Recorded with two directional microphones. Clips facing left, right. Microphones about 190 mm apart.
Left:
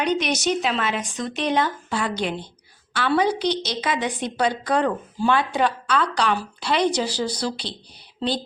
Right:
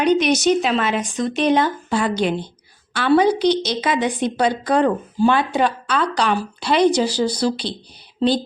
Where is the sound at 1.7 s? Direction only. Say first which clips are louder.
Right 5 dB; 35° right (ahead or behind).